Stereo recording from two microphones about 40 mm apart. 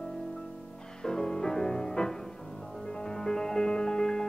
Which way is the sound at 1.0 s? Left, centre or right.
Centre.